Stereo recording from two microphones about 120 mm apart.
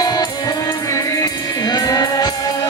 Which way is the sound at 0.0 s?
35° left (ahead or behind).